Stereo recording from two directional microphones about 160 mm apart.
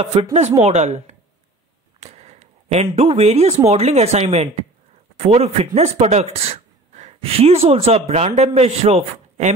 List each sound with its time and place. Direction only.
0.0 s speech: 40° right (ahead or behind)